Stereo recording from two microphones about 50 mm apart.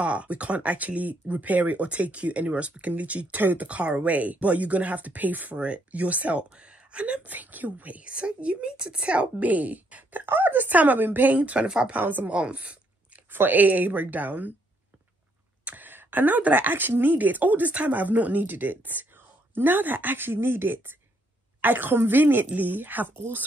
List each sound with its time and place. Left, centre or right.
0.0 s speech: right
3.3 s speech: right
3.6 s speech: right
10.2 s speech: right
11.9 s speech: right
12.3 s speech: right
13.3 s speech: right
15.6 s speech: right